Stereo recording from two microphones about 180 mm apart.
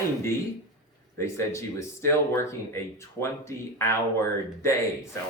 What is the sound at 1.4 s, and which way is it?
Speech, 15° left (ahead or behind).